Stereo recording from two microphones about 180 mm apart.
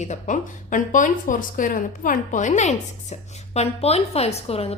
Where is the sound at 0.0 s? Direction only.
40° left (ahead or behind).